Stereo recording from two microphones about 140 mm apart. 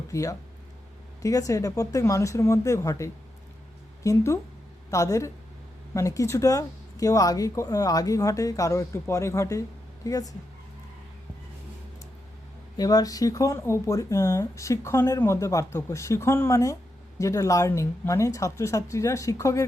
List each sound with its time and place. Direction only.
0.1 s speech: 25° left (ahead or behind)
12.7 s speech: 25° left (ahead or behind)